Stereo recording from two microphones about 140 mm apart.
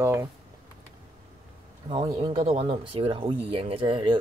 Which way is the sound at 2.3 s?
45° right (ahead or behind).